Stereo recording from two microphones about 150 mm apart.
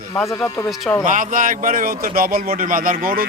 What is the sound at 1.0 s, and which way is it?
A man's voice, 60° right (ahead or behind).